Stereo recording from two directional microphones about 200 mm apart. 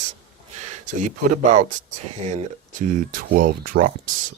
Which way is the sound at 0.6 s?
40° right (ahead or behind).